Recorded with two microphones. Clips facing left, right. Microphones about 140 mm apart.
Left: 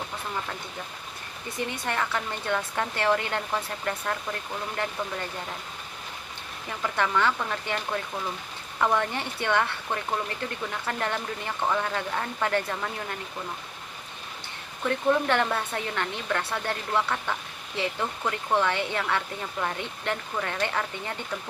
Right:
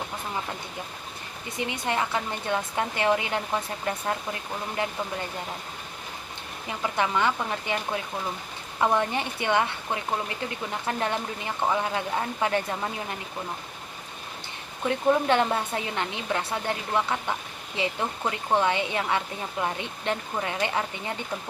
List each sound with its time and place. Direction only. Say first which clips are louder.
1.5 s speech: right 2 dB; 15° right (ahead or behind)
6.7 s speech: right 1 dB; 15° right (ahead or behind)
14.8 s speech: right 2 dB; 20° right (ahead or behind)